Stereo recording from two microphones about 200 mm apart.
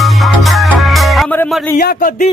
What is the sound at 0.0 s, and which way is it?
Music, centre (ahead or behind).